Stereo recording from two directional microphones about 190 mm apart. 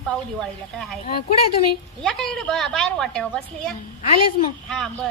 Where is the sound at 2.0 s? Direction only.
5° left (ahead or behind).